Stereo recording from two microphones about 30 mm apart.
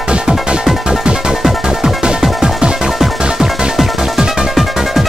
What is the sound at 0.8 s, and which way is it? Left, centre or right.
Music, right.